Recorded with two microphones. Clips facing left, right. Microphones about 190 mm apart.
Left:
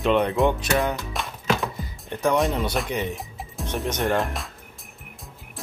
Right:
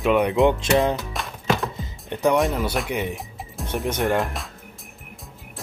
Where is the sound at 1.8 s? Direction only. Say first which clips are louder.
Right 5 dB; 20° right (ahead or behind).